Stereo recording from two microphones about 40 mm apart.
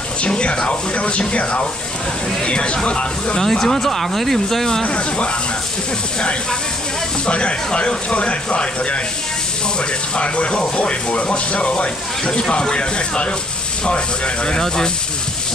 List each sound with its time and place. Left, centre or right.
0.4 s speech: left
3.3 s speech: centre
4.8 s speech: left
7.2 s speech: left
10.1 s speech: left